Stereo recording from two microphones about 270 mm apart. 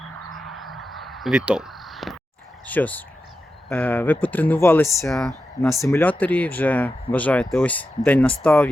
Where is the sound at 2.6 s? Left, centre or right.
Centre.